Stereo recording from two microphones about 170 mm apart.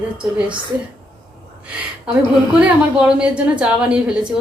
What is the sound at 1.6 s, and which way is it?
Speech, 5° right (ahead or behind).